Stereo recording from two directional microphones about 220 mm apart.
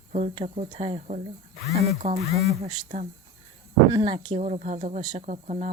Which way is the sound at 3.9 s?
20° right (ahead or behind).